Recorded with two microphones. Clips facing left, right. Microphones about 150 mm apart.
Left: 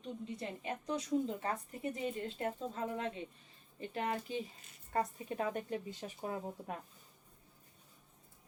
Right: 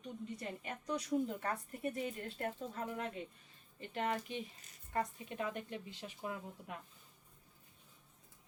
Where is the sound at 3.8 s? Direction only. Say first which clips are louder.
Even; 35° left (ahead or behind).